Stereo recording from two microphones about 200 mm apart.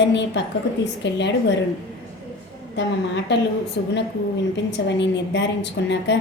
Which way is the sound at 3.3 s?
60° left (ahead or behind).